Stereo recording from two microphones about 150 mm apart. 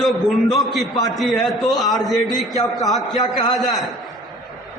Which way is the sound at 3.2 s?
25° left (ahead or behind).